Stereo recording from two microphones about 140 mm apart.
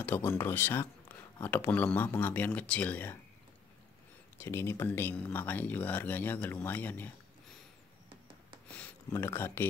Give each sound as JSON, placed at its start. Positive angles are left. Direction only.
{"t": 0.0, "sound": "speech", "side_deg": 15}
{"t": 4.4, "sound": "speech", "side_deg": 15}
{"t": 8.7, "sound": "speech", "side_deg": 15}